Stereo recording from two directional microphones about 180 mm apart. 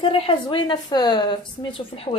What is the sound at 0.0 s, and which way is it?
Speech, 30° left (ahead or behind).